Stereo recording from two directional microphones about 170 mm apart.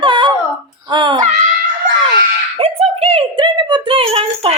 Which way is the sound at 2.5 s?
35° right (ahead or behind).